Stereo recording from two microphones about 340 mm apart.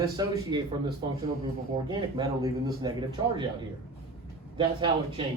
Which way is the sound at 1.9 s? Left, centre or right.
Centre.